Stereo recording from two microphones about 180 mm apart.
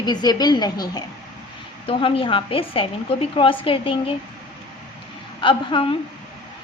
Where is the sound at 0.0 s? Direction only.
25° left (ahead or behind).